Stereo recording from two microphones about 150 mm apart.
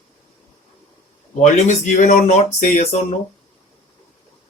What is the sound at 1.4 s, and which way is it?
Speech, 55° left (ahead or behind).